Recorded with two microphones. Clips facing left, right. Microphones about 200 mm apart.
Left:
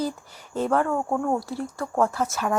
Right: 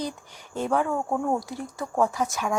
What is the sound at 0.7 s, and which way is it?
Speech, centre (ahead or behind).